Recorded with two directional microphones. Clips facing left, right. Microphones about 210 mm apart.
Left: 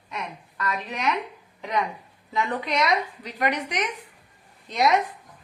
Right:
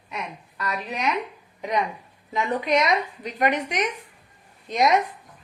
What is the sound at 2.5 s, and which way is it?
A woman's voice, 20° right (ahead or behind).